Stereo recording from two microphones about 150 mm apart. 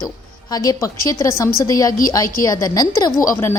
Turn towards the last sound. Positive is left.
turn(degrees=20)  # may be behind; listen again after turning